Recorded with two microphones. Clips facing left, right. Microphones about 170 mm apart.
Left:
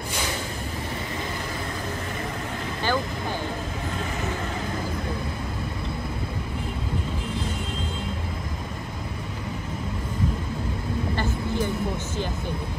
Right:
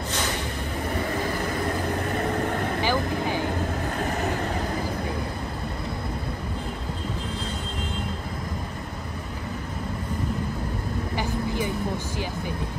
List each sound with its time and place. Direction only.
2.1 s vehicle: 55° right (ahead or behind)
2.8 s vehicle: 15° right (ahead or behind)
11.1 s vehicle: 10° right (ahead or behind)